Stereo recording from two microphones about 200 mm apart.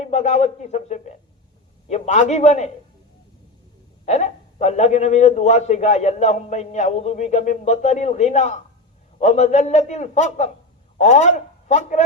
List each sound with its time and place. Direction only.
0.0 s a man's voice: 35° left (ahead or behind)
4.0 s a man's voice: 35° left (ahead or behind)